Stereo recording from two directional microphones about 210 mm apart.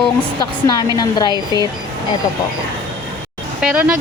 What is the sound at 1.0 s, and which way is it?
Speech, 20° left (ahead or behind).